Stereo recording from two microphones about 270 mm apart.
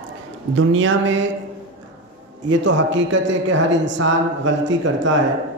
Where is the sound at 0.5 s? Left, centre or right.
Right.